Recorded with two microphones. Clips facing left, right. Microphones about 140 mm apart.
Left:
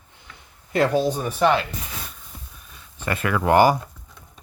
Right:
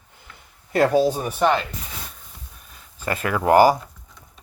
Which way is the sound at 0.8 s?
5° right (ahead or behind).